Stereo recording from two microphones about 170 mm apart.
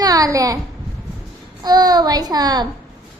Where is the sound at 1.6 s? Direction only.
25° right (ahead or behind).